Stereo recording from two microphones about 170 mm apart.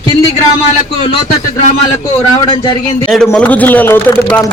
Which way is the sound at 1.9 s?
25° left (ahead or behind).